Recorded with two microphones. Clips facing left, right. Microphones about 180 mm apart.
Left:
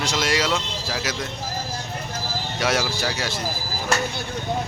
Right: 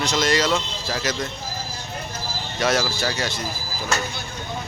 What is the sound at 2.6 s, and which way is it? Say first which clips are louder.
Speech: right 2 dB; 10° left (ahead or behind).